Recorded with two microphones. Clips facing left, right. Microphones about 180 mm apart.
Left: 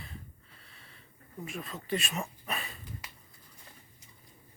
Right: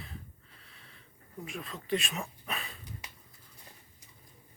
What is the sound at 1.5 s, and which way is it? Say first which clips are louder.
Speech: right 1 dB; centre (ahead or behind).